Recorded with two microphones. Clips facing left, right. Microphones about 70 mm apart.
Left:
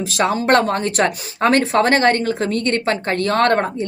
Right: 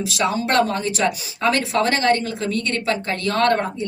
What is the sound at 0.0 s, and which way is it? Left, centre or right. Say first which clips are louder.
Speech: left 3 dB; left.